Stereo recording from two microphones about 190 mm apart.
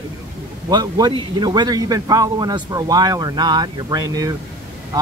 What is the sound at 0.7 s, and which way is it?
A man's voice, 20° right (ahead or behind).